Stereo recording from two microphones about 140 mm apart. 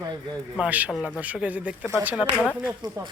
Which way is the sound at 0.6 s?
10° right (ahead or behind).